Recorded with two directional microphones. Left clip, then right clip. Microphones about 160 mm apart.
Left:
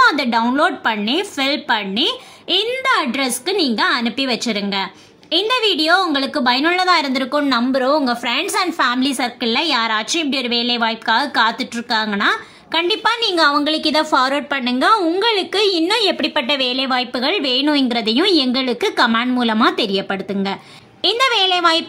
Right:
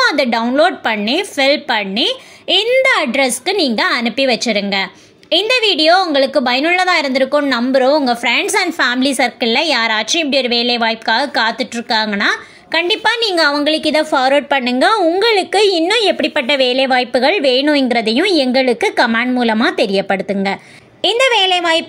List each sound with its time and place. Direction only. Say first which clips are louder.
0.0 s a woman's voice: even; 15° right (ahead or behind)